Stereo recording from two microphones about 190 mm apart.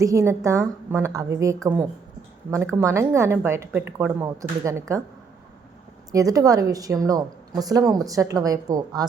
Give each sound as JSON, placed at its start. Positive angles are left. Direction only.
{"t": 0.0, "sound": "a woman's voice", "side_deg": -15}
{"t": 6.1, "sound": "a woman's voice", "side_deg": -20}